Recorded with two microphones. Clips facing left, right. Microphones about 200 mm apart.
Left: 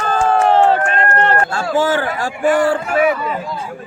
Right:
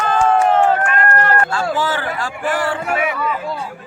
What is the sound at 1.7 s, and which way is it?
Speech, 45° left (ahead or behind).